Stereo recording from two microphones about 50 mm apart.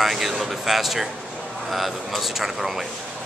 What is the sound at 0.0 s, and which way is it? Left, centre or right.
A man's voice, centre.